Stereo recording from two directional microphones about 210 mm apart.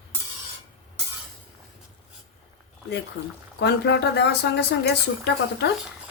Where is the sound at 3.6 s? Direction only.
55° left (ahead or behind).